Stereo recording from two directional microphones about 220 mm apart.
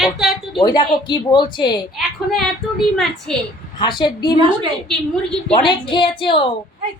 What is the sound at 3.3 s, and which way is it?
Speech, 5° left (ahead or behind).